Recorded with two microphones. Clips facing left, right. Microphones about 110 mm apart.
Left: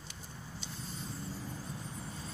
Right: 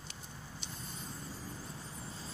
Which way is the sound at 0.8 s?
50° right (ahead or behind).